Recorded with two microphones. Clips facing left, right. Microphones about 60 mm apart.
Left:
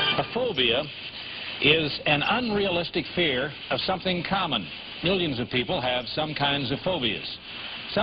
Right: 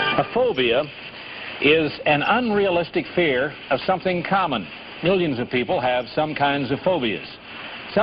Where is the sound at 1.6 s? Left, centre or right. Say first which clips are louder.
Right 6 dB; right.